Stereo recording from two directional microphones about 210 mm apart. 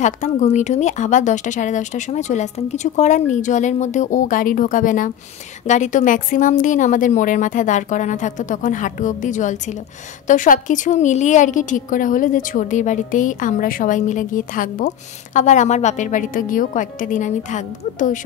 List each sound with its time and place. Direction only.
0.0 s a woman's voice: 35° left (ahead or behind)